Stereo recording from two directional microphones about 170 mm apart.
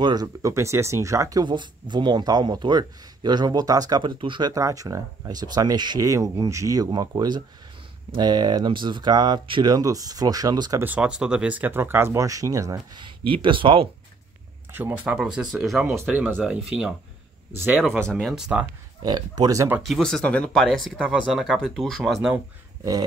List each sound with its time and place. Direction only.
0.0 s speech: 25° right (ahead or behind)
10.8 s speech: 10° right (ahead or behind); by 13.8 s 30° right (ahead or behind)
14.7 s speech: 10° right (ahead or behind)
18.0 s speech: centre (ahead or behind)
19.0 s speech: 25° right (ahead or behind)
19.8 s speech: centre (ahead or behind)